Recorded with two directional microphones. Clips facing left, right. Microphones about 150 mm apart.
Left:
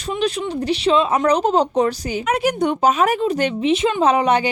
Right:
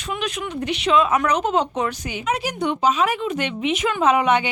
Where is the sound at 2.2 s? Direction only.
55° left (ahead or behind).